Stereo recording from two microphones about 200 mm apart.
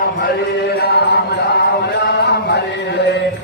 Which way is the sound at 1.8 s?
55° left (ahead or behind).